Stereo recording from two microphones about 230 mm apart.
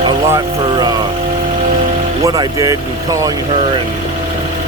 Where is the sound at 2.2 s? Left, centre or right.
Centre.